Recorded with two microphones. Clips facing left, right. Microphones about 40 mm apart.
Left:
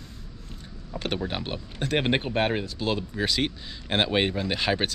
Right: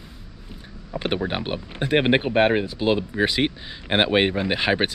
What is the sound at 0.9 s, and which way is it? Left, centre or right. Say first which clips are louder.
Speech: right 5 dB; centre.